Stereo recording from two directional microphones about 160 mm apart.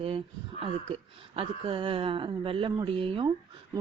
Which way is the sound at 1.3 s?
35° right (ahead or behind).